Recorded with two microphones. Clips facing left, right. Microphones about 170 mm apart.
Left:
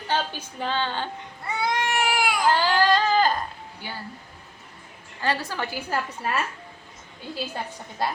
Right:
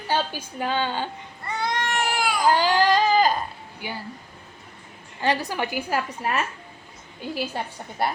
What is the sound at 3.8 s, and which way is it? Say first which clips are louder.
Speech: right 4 dB; 15° right (ahead or behind).